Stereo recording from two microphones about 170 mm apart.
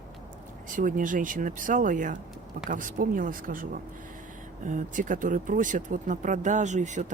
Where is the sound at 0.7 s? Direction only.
50° right (ahead or behind).